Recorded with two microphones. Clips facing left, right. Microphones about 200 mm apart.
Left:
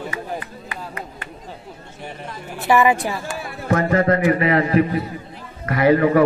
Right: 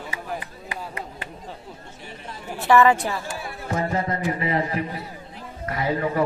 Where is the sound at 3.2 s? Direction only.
80° left.